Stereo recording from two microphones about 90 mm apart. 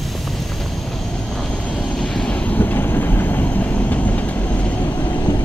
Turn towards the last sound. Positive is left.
turn(degrees=20)  # may be behind; listen again after turning